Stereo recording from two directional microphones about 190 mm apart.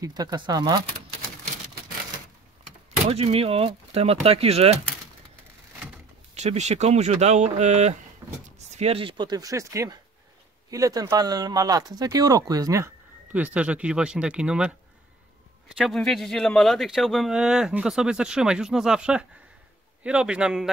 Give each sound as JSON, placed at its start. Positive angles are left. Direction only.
{"t": 0.0, "sound": "speech", "side_deg": -20}
{"t": 3.1, "sound": "speech", "side_deg": -30}
{"t": 6.3, "sound": "speech", "side_deg": -35}
{"t": 15.8, "sound": "speech", "side_deg": 0}